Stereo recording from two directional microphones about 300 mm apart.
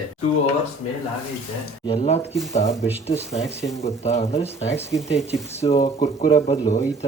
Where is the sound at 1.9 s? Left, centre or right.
Left.